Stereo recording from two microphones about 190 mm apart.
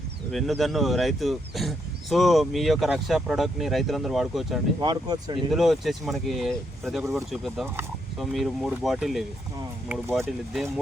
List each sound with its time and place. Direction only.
0.3 s speech: centre (ahead or behind)
4.8 s speech: 20° right (ahead or behind)
5.5 s speech: centre (ahead or behind)